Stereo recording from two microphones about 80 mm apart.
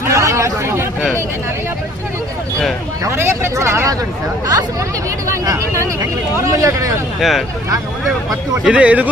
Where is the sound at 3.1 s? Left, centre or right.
Right.